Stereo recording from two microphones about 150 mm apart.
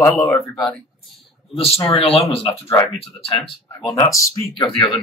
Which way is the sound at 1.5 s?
40° left (ahead or behind).